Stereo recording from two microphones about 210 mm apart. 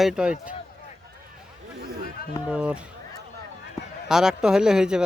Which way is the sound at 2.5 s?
5° right (ahead or behind).